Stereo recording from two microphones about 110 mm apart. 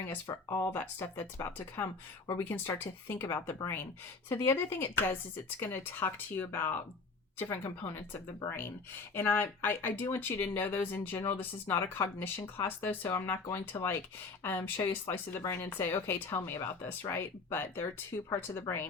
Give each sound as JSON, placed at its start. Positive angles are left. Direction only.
{"t": 0.3, "sound": "speech", "side_deg": 35}
{"t": 0.6, "sound": "speech", "side_deg": 20}